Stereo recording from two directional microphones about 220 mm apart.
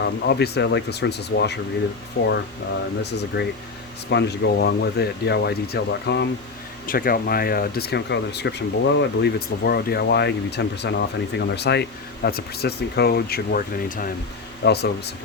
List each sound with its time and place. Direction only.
0.0 s speech: 50° left (ahead or behind)
6.8 s speech: 40° left (ahead or behind)